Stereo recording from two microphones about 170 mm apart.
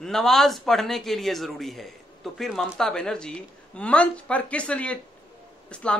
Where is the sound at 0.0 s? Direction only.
Centre (ahead or behind).